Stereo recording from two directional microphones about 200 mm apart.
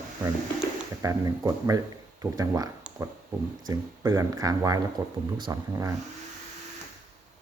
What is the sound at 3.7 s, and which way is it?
Speech, 15° right (ahead or behind).